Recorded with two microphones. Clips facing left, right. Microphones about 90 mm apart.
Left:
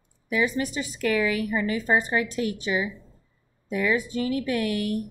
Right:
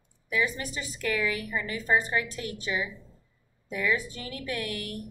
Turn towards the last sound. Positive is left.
turn(degrees=20)  # may be behind; listen again after turning